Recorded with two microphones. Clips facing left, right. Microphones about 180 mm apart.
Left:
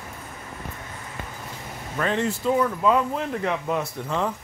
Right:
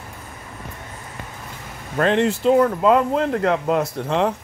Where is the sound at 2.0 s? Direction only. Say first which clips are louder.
Right 7 dB; 70° right (ahead or behind).